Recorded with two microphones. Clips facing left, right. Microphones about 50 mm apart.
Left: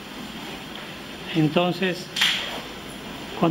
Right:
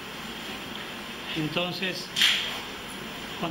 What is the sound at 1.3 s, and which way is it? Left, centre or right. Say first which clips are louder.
Speech: left 9 dB; centre.